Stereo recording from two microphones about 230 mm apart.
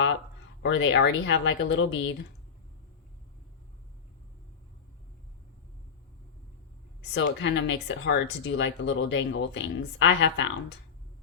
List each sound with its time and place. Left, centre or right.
0.6 s speech: left
7.1 s speech: left